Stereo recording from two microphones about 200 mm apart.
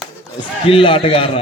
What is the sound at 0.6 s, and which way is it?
Speech, 25° left (ahead or behind).